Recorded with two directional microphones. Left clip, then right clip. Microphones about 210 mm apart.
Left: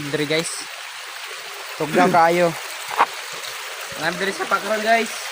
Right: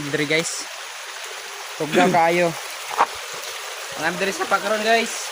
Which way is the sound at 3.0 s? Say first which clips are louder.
Left 1 dB; 50° left (ahead or behind).